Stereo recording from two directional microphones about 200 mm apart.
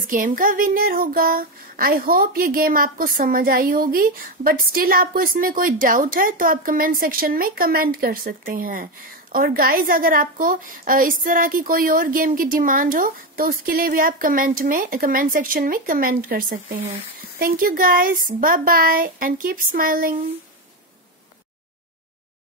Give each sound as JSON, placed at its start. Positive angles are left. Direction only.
{"t": 0.1, "sound": "child singing", "side_deg": -40}